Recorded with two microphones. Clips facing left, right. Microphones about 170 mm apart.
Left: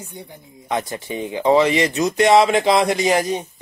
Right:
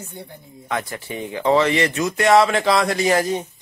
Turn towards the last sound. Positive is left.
turn(degrees=15)  # may be behind; listen again after turning